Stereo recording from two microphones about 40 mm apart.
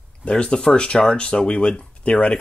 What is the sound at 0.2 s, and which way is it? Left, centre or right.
Speech, left.